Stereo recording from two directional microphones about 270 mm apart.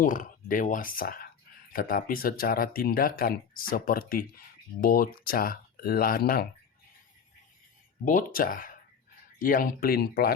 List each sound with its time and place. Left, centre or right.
0.0 s speech: left
8.0 s speech: left